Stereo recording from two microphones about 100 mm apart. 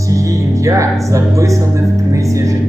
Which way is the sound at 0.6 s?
30° right (ahead or behind).